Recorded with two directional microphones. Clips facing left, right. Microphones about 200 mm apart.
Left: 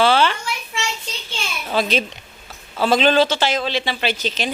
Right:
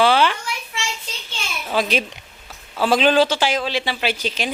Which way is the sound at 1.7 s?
10° right (ahead or behind).